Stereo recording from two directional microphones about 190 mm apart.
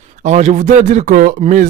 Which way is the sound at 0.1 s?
40° right (ahead or behind).